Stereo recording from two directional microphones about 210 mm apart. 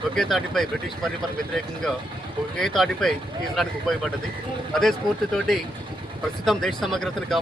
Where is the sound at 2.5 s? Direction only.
Centre (ahead or behind).